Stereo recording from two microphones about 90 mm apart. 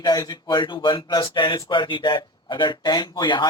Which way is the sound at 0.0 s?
50° left (ahead or behind).